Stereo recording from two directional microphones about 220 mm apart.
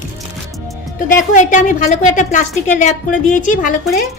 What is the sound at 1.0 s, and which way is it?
A woman's voice, 35° left (ahead or behind).